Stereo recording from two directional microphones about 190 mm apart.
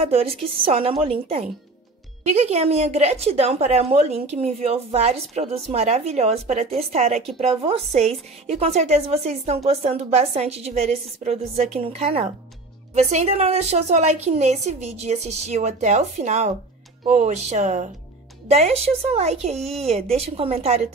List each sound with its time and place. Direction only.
0.0 s a woman's voice: 30° right (ahead or behind)